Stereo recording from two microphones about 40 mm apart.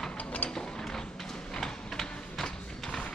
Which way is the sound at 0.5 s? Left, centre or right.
Centre.